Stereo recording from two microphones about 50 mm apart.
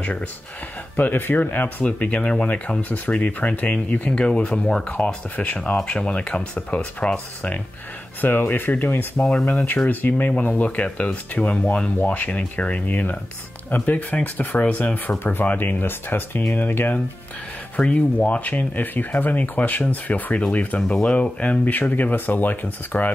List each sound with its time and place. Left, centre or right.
0.9 s speech: left
8.2 s speech: left
9.2 s speech: centre
9.8 s speech: left
14.6 s speech: left